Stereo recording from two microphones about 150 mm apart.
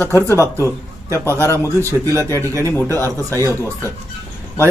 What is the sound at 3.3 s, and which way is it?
Speech, 20° right (ahead or behind).